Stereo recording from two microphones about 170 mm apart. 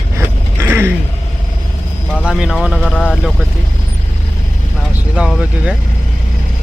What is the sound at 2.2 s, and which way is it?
Speech, centre (ahead or behind).